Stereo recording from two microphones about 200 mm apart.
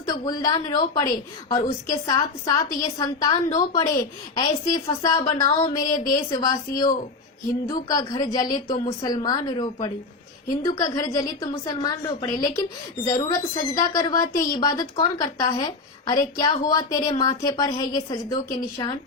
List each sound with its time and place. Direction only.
0.1 s a woman's voice: 20° left (ahead or behind)